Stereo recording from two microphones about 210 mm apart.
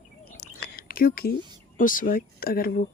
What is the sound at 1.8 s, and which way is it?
Speech, 40° left (ahead or behind).